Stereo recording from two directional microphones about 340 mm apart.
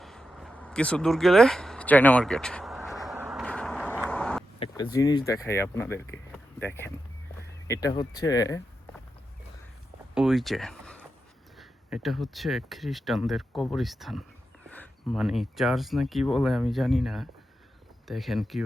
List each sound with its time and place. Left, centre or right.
0.0 s a sound: centre
4.7 s speech: centre
10.2 s speech: centre